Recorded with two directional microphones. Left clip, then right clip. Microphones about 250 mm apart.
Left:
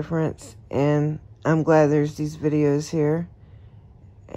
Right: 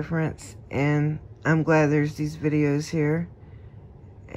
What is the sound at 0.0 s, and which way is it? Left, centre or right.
Speech, centre.